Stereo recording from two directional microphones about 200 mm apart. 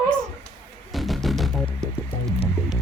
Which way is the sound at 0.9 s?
Centre (ahead or behind).